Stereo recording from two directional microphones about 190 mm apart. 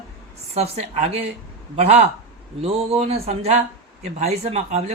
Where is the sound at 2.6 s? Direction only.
30° right (ahead or behind).